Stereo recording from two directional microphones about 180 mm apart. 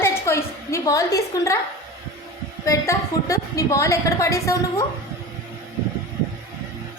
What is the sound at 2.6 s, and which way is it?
A woman's voice, 15° left (ahead or behind).